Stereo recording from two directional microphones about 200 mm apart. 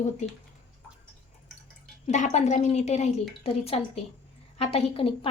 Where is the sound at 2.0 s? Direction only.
35° left (ahead or behind).